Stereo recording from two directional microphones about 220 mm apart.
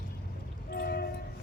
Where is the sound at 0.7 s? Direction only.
45° left (ahead or behind).